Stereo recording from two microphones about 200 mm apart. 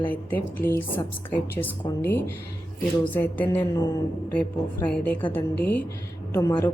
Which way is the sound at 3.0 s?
10° left (ahead or behind).